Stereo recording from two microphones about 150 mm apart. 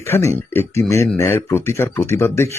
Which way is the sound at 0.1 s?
15° left (ahead or behind).